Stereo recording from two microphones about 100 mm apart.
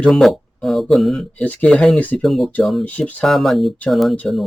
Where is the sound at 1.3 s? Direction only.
15° left (ahead or behind).